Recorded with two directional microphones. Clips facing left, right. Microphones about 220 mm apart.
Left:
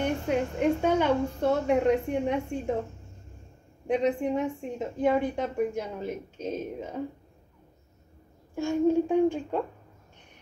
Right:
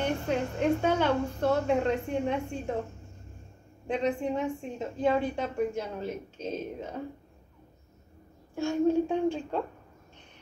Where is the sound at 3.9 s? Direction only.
20° left (ahead or behind).